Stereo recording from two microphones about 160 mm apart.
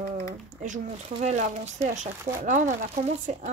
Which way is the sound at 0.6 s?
50° right (ahead or behind).